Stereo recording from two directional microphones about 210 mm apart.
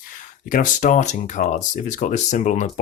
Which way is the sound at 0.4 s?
40° left (ahead or behind).